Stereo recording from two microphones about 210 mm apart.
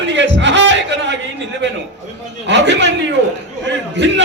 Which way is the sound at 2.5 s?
55° right (ahead or behind).